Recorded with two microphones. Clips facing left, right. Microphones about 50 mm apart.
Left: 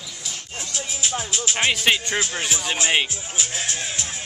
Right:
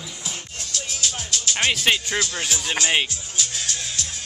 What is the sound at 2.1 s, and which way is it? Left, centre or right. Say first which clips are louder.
Speech: left 1 dB; left.